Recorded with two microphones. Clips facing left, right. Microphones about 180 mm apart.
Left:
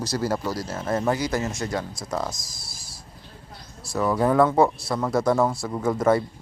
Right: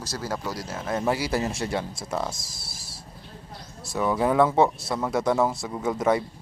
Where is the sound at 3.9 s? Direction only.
Centre (ahead or behind).